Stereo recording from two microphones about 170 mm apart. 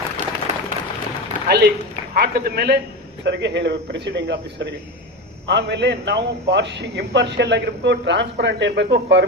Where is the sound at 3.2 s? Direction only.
90° right.